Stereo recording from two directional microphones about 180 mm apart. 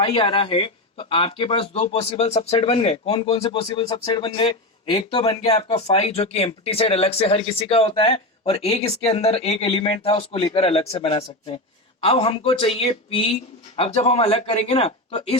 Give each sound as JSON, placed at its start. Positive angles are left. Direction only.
{"t": 0.0, "sound": "a man's voice", "side_deg": 30}